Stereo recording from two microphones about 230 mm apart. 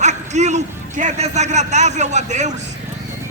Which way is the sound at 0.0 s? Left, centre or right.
Right.